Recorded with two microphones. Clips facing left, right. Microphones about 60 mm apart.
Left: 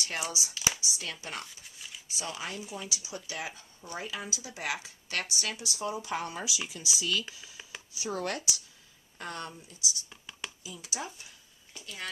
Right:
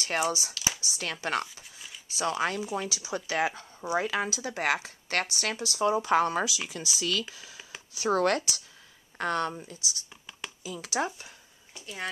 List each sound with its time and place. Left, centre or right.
0.0 s speech: right
0.6 s a sound: centre
0.8 s speech: right
11.1 s speech: right
11.8 s speech: right